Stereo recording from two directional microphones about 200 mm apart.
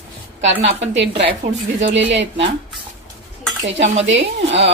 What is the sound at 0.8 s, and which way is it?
Speech, 65° right (ahead or behind).